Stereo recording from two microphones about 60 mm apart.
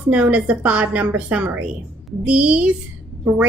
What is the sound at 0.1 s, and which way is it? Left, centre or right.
A woman's voice, right.